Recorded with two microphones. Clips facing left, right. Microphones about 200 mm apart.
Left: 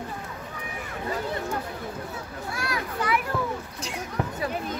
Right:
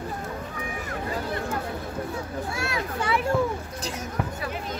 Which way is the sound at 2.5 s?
25° right (ahead or behind).